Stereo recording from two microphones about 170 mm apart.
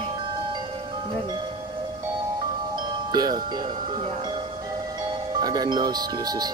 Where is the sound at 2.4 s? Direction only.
25° right (ahead or behind).